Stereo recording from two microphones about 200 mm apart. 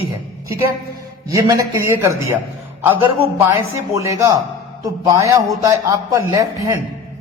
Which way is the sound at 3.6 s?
15° right (ahead or behind).